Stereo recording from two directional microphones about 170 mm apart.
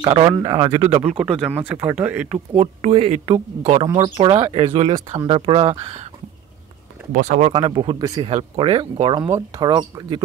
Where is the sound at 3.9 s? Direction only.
25° right (ahead or behind).